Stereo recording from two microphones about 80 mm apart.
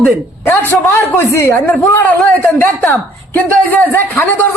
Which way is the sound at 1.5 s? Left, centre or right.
Left.